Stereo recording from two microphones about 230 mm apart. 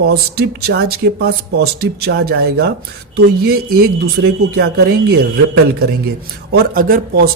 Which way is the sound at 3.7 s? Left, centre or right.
Right.